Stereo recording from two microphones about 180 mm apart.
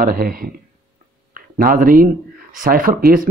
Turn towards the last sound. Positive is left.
turn(degrees=-50)  # may be behind; listen again after turning